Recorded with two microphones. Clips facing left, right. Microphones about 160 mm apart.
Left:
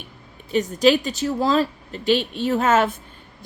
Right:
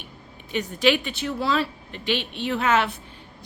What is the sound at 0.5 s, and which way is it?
A woman's voice, 40° left (ahead or behind).